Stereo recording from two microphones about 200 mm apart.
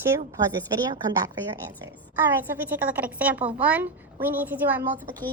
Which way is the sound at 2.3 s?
10° right (ahead or behind).